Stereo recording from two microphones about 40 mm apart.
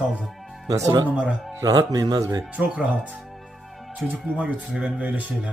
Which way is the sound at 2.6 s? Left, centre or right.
Right.